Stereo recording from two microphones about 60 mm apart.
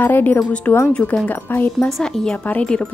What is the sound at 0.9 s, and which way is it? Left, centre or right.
Wind chime, centre.